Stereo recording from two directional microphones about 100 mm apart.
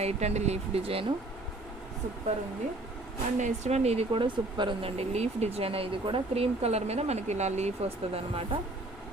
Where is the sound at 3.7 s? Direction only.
90° right.